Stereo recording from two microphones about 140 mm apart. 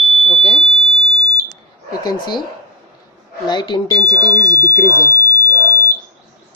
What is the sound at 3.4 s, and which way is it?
Speech, 30° left (ahead or behind).